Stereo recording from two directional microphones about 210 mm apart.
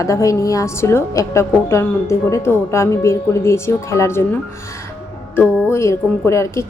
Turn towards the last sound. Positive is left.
turn(degrees=15)  # may be behind; listen again after turning